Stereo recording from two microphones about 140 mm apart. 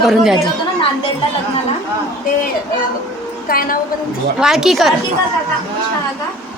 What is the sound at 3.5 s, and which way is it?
Speech, 90° left.